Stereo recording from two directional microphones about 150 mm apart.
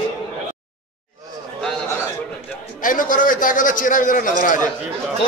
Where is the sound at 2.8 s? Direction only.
65° left (ahead or behind).